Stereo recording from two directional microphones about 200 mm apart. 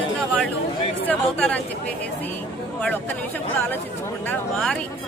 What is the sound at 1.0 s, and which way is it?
Speech, 10° left (ahead or behind).